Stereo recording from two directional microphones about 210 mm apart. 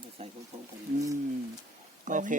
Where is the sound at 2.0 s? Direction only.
35° right (ahead or behind).